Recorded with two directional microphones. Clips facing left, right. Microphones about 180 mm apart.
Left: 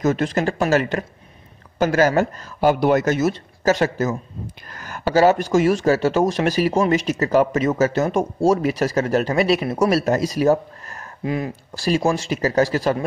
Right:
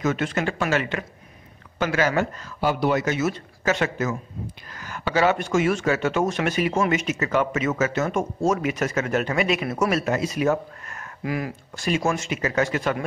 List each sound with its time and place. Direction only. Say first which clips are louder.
0.0 s speech: left 4 dB; 40° left (ahead or behind)